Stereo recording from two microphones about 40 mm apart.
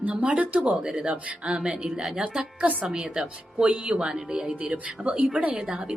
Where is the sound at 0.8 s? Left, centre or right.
Right.